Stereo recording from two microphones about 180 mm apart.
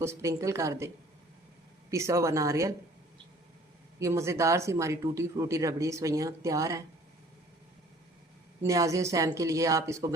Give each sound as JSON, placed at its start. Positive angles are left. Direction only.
{"t": 0.0, "sound": "speech", "side_deg": -15}
{"t": 1.9, "sound": "speech", "side_deg": -15}
{"t": 4.0, "sound": "speech", "side_deg": -15}
{"t": 8.6, "sound": "speech", "side_deg": -20}